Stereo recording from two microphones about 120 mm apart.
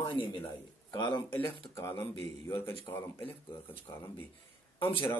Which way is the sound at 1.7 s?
20° left (ahead or behind).